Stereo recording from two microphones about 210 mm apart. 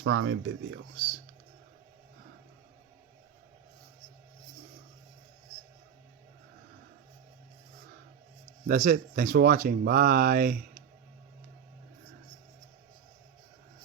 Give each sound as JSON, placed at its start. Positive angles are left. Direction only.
{"t": 0.0, "sound": "speech", "side_deg": -65}
{"t": 8.6, "sound": "speech", "side_deg": -40}